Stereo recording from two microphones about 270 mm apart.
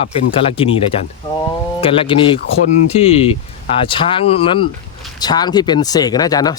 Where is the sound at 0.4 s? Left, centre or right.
Centre.